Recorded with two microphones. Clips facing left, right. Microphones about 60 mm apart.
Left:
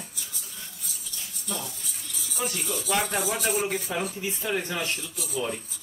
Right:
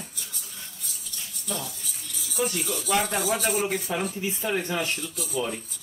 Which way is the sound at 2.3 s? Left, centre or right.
Centre.